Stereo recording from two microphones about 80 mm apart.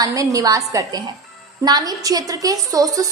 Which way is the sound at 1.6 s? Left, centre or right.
Right.